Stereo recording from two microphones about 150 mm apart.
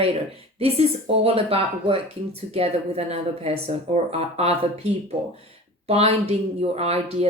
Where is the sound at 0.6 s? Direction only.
40° right (ahead or behind).